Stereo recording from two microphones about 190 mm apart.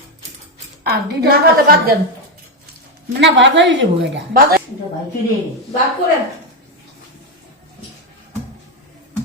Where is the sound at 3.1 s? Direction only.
70° right (ahead or behind).